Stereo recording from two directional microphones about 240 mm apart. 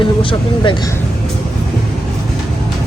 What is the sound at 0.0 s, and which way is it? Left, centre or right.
Vehicle, left.